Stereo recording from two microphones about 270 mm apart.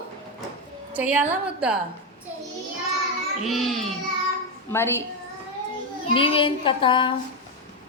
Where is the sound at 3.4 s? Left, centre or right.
Centre.